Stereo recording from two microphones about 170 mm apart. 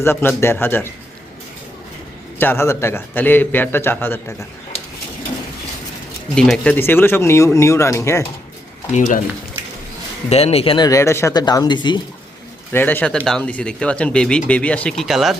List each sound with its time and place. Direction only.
0.0 s speech: 15° left (ahead or behind)
2.4 s speech: 15° left (ahead or behind)
6.3 s speech: 5° left (ahead or behind)
8.9 s speech: 45° left (ahead or behind)
10.2 s speech: 35° left (ahead or behind)
10.8 s speech: 15° left (ahead or behind)
12.7 s speech: 10° left (ahead or behind)